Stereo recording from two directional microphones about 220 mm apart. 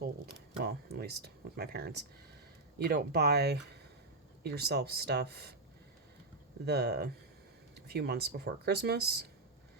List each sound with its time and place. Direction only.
0.6 s speech: 45° right (ahead or behind)
6.7 s speech: 45° right (ahead or behind)